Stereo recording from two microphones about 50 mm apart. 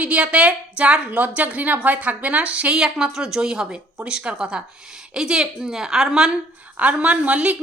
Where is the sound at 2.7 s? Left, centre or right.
Centre.